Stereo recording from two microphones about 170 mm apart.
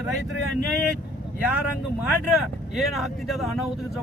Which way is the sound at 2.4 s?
Centre (ahead or behind).